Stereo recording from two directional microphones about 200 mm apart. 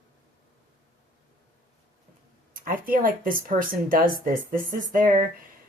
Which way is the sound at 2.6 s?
45° right (ahead or behind).